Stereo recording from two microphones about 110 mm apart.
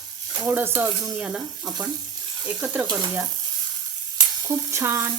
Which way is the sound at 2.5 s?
15° right (ahead or behind).